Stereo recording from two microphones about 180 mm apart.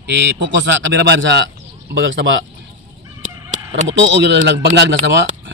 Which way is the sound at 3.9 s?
90° right.